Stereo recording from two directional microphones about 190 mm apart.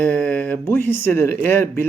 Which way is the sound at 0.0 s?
10° left (ahead or behind).